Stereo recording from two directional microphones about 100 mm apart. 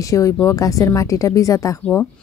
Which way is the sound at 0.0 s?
35° left (ahead or behind).